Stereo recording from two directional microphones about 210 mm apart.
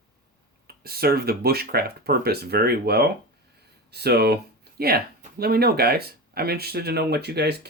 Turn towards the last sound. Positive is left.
turn(degrees=-50)  # may be behind; listen again after turning